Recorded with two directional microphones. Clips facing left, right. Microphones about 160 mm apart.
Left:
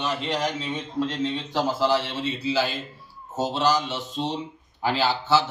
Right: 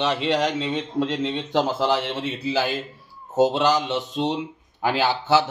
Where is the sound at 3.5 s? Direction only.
55° right (ahead or behind).